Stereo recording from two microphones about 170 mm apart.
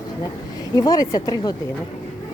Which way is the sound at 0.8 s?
20° left (ahead or behind).